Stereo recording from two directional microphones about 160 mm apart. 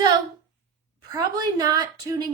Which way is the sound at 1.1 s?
20° right (ahead or behind).